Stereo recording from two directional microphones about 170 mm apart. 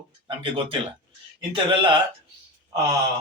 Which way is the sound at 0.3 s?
30° right (ahead or behind).